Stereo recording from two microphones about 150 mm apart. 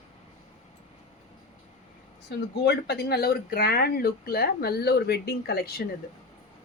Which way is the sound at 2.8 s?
90° left.